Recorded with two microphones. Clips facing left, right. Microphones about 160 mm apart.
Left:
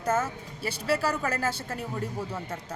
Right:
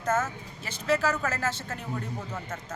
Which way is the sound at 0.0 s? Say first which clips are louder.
Even; 10° left (ahead or behind).